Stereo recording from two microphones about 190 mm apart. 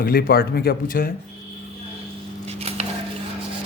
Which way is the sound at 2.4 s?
35° right (ahead or behind).